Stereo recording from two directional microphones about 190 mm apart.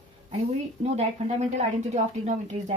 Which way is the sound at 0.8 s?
35° right (ahead or behind).